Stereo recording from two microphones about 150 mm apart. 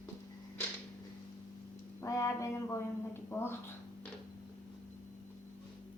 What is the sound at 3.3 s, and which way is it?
Speech, 15° left (ahead or behind).